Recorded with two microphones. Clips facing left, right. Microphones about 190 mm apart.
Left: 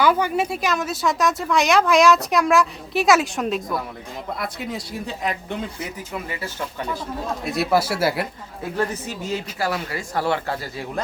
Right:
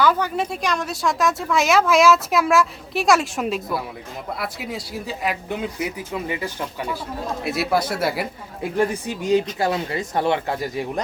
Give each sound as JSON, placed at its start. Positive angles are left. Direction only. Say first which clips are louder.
{"t": 0.0, "sound": "a woman's voice", "louder": "left 1 dB", "side_deg": 10}
{"t": 6.2, "sound": "speech", "louder": "right 4 dB", "side_deg": -20}
{"t": 7.4, "sound": "a woman's voice", "louder": "left 1 dB", "side_deg": 0}
{"t": 8.7, "sound": "speech", "louder": "right 4 dB", "side_deg": -15}